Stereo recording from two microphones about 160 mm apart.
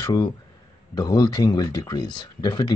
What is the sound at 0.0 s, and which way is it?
A man's voice, 25° left (ahead or behind).